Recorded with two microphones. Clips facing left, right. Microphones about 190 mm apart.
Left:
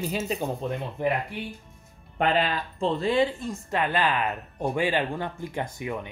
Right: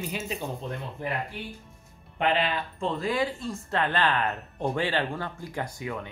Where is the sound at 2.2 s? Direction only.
40° left (ahead or behind); by 6.1 s 20° left (ahead or behind).